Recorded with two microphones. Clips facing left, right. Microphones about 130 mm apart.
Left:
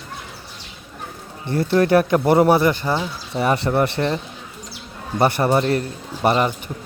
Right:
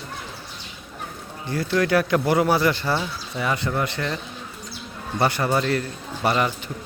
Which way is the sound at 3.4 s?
30° left (ahead or behind).